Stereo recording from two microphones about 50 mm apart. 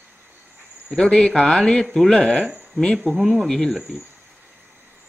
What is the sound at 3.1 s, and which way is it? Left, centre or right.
Speech, centre.